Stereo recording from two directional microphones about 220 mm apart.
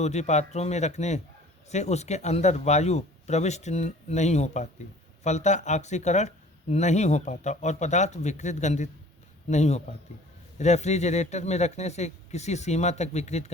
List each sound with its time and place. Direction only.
0.0 s speech: 30° left (ahead or behind)